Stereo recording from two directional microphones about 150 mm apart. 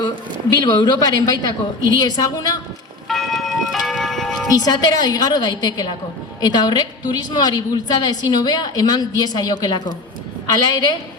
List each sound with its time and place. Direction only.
0.6 s a woman's voice: 25° left (ahead or behind)
3.1 s church bell: centre (ahead or behind)
4.5 s a woman's voice: 25° left (ahead or behind)